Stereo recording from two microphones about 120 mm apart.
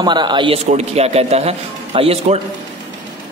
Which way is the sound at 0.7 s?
60° right (ahead or behind).